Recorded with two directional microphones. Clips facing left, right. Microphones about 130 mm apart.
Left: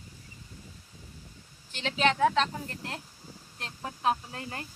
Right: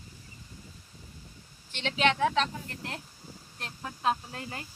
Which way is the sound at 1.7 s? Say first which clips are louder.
Even; 35° left (ahead or behind).